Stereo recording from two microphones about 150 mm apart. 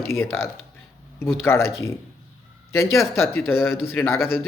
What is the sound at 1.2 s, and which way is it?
Speech, 15° left (ahead or behind).